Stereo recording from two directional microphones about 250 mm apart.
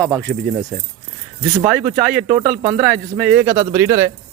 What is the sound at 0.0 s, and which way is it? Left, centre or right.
Speech, centre.